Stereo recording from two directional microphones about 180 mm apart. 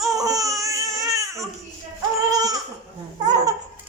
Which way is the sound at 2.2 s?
20° right (ahead or behind).